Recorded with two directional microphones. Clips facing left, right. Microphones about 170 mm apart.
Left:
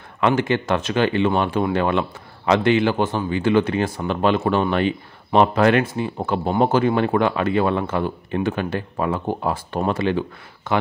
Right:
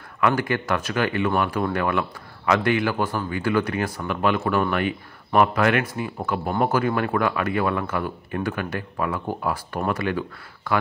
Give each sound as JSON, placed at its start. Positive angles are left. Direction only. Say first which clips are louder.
{"t": 0.2, "sound": "speech", "louder": "left 3 dB", "side_deg": 25}